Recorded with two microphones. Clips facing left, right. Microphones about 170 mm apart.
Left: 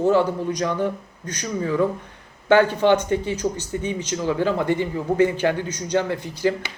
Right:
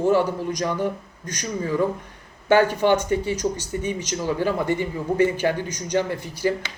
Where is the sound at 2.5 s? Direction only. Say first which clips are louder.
Left 1 dB; 10° right (ahead or behind).